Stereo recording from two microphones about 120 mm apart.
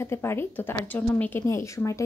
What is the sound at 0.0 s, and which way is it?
A woman's voice, 20° left (ahead or behind).